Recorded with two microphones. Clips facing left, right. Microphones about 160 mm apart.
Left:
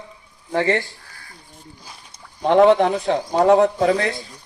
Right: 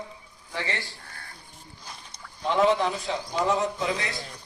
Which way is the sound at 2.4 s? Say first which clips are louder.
Left 9 dB; 60° left (ahead or behind).